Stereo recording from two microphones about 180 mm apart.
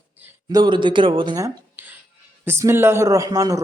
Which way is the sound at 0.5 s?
25° right (ahead or behind).